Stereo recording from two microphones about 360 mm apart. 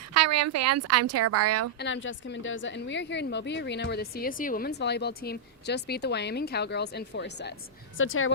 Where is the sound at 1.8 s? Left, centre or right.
Left.